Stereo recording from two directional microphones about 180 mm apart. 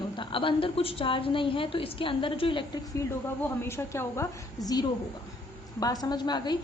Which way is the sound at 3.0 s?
15° left (ahead or behind).